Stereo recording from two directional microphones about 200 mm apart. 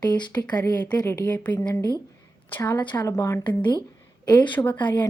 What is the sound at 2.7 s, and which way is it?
A woman's voice, 20° left (ahead or behind).